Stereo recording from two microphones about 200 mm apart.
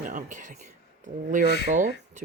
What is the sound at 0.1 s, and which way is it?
Speech, 40° right (ahead or behind).